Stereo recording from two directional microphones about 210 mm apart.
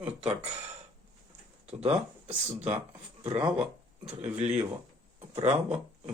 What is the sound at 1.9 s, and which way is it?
Speech, 30° right (ahead or behind).